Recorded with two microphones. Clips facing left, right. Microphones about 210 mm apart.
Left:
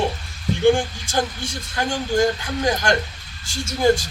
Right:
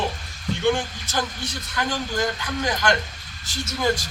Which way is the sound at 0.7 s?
30° left (ahead or behind).